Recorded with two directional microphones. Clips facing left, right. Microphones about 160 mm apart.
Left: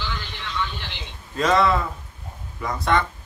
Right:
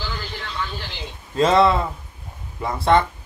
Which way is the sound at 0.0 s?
35° right (ahead or behind).